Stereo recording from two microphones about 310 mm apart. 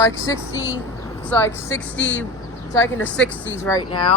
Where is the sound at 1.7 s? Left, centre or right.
Left.